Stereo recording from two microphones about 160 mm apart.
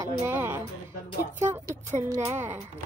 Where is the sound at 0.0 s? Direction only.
15° right (ahead or behind).